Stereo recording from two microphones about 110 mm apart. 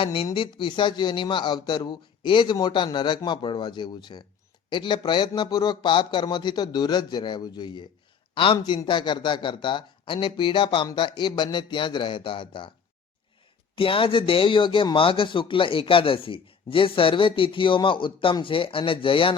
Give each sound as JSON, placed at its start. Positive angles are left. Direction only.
{"t": 0.0, "sound": "a man's voice", "side_deg": 50}
{"t": 13.7, "sound": "a man's voice", "side_deg": 55}